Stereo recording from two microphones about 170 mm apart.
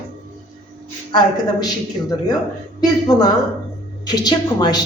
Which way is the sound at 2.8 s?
25° left (ahead or behind).